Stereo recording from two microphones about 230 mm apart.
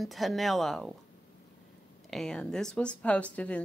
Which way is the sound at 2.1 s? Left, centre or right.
Centre.